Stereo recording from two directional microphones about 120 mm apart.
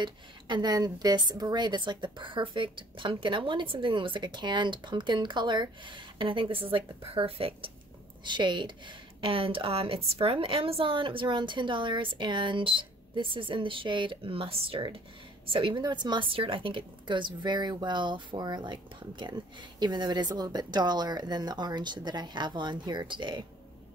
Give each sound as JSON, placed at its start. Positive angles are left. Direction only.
{"t": 0.0, "sound": "a woman's voice", "side_deg": -40}
{"t": 8.2, "sound": "a woman's voice", "side_deg": -40}